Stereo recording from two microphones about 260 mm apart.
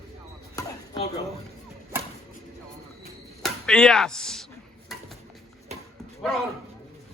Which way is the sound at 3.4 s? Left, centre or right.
Centre.